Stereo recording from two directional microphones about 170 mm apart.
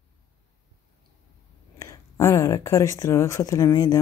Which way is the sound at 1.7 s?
15° left (ahead or behind).